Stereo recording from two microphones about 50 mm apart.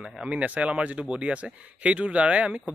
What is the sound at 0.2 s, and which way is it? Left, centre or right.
Speech, right.